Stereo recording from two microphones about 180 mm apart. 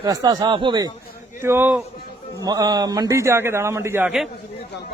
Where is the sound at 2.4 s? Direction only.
20° right (ahead or behind); by 4.3 s 5° right (ahead or behind).